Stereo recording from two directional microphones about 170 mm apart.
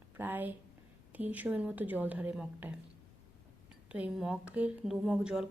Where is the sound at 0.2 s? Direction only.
10° right (ahead or behind).